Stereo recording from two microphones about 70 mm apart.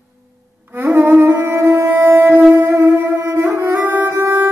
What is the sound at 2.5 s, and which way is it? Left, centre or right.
Music, right.